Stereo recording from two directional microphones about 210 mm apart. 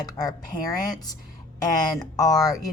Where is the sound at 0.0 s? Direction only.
20° left (ahead or behind).